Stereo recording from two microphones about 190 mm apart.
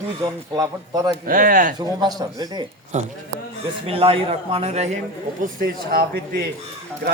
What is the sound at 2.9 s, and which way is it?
A man's voice, 35° right (ahead or behind).